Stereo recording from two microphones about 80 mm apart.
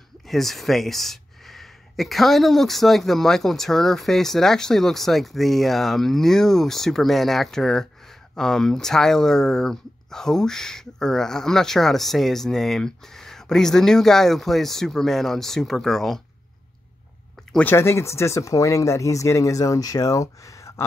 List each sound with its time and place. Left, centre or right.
0.3 s speech: centre
17.6 s speech: left